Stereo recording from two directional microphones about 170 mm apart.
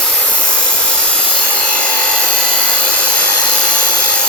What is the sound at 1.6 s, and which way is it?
Rub, 5° left (ahead or behind).